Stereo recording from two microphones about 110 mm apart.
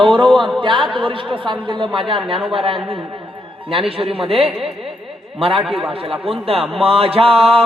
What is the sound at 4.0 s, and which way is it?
Mantra, 60° right (ahead or behind).